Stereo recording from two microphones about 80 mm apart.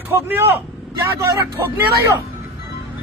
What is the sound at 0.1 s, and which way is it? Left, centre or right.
Speech, right.